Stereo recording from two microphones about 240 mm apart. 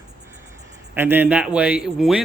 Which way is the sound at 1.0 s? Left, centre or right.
Centre.